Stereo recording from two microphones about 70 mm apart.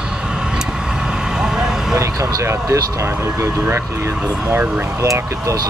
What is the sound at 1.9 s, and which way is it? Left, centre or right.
Speech, right.